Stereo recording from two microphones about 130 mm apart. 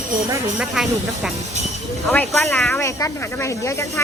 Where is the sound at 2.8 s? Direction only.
20° left (ahead or behind).